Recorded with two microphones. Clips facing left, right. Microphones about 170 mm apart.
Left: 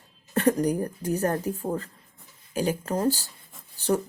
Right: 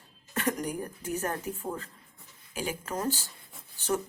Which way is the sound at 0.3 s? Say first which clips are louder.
Left 8 dB; 35° left (ahead or behind).